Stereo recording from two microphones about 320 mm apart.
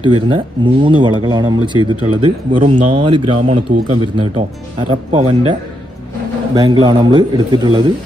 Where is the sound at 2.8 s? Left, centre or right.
Centre.